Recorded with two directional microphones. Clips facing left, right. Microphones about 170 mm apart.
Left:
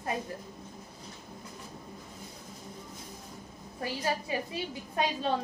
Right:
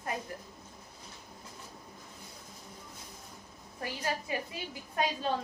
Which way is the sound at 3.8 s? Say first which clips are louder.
Left 3 dB; 25° left (ahead or behind).